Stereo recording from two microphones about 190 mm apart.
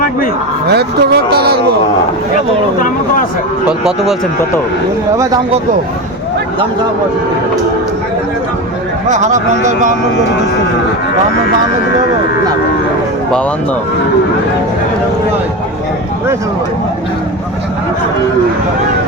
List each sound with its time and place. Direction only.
0.7 s speech: 60° right (ahead or behind)
3.7 s speech: 5° right (ahead or behind)
5.1 s speech: 15° right (ahead or behind)
9.0 s speech: 40° right (ahead or behind)